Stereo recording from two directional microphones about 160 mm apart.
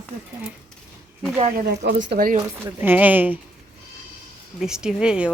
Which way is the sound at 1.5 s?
85° right.